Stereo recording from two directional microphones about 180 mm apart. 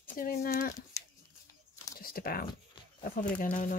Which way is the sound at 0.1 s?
55° left (ahead or behind).